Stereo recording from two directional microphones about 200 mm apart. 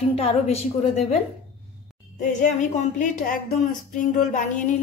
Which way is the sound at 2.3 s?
40° left (ahead or behind).